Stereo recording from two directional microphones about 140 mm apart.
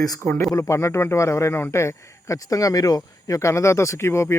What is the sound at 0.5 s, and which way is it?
Speech, 20° left (ahead or behind).